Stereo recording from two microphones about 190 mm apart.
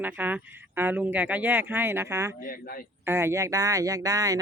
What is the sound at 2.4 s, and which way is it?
Speech, 50° left (ahead or behind).